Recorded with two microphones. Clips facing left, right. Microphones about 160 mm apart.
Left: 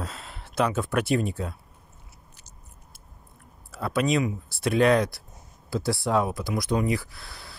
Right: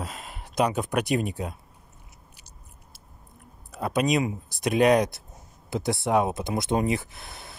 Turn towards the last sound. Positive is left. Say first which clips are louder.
# right 2 dB
turn(degrees=-20)  # may be behind; listen again after turning